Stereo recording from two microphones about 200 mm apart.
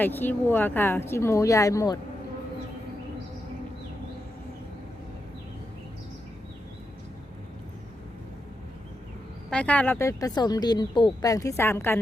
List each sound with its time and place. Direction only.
0.0 s speech: 10° left (ahead or behind)
9.5 s speech: 5° left (ahead or behind)